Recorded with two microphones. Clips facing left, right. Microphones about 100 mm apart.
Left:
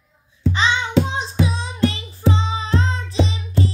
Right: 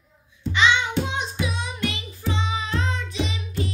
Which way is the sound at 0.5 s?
35° left (ahead or behind).